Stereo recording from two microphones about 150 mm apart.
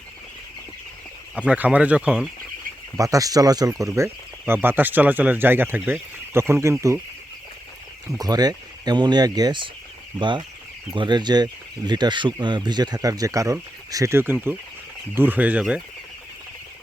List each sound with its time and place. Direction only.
1.5 s speech: 10° right (ahead or behind)
3.0 s speech: 25° right (ahead or behind)
8.2 s speech: 25° right (ahead or behind); by 15.8 s 10° right (ahead or behind)